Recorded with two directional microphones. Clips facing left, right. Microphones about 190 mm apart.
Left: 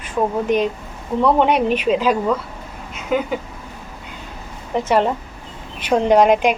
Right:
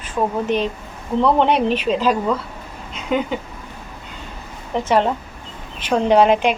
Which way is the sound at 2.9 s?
5° left (ahead or behind).